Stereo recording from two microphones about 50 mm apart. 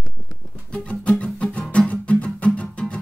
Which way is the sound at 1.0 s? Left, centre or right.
Left.